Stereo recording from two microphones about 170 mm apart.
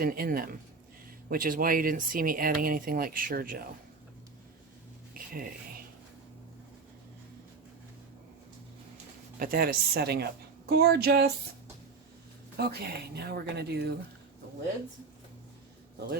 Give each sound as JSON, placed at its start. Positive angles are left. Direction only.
{"t": 0.0, "sound": "speech", "side_deg": -60}
{"t": 5.1, "sound": "a sound", "side_deg": -60}
{"t": 9.4, "sound": "speech", "side_deg": -60}
{"t": 12.5, "sound": "speech", "side_deg": -70}